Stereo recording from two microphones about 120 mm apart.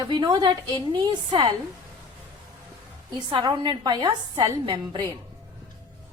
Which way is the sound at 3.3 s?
40° right (ahead or behind).